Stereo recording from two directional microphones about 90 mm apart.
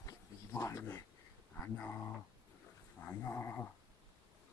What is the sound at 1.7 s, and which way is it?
Speech, 20° left (ahead or behind).